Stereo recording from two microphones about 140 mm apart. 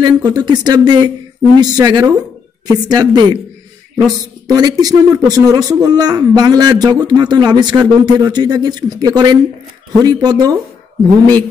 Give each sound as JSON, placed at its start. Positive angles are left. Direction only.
{"t": 0.0, "sound": "a man's voice", "side_deg": -30}